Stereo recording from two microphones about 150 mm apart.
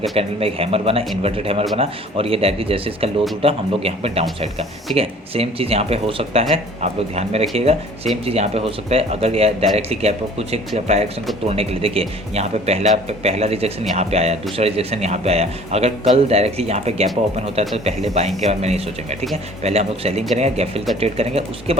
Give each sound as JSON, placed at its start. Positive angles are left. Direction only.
{"t": 0.2, "sound": "speech", "side_deg": -40}